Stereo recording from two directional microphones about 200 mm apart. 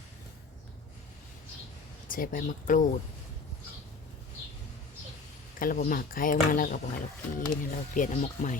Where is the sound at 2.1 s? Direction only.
45° left (ahead or behind).